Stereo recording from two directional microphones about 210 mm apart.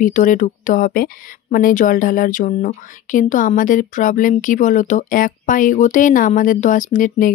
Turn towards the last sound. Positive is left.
turn(degrees=40)  # may be behind; listen again after turning